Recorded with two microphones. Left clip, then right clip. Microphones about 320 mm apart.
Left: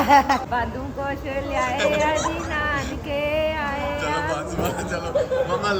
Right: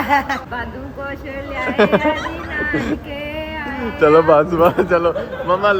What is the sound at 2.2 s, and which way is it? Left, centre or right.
Speech, centre.